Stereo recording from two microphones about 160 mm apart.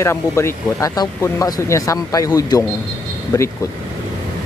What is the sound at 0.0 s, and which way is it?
Speech, 15° left (ahead or behind).